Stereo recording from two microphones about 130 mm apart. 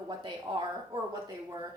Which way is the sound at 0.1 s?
35° right (ahead or behind).